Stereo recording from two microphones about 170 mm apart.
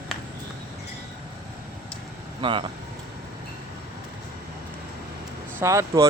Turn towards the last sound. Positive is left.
turn(degrees=-15)  # may be behind; listen again after turning